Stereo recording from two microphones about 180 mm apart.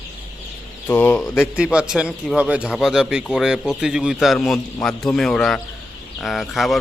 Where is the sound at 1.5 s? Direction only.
5° right (ahead or behind).